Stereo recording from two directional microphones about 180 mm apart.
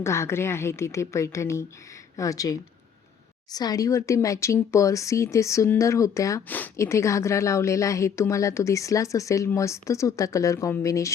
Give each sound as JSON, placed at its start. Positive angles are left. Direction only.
{"t": 0.0, "sound": "speech", "side_deg": 15}